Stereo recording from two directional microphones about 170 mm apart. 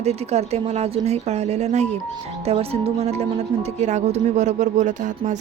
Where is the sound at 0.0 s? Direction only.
40° right (ahead or behind).